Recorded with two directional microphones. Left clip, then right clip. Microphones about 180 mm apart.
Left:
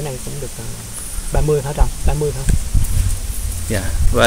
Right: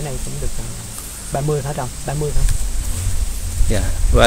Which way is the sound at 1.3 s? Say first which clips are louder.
Left 3 dB; 10° left (ahead or behind).